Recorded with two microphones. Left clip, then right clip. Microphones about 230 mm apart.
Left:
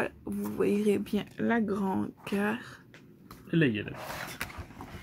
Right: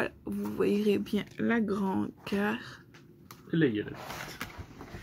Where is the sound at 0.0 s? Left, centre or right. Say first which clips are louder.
Even; centre.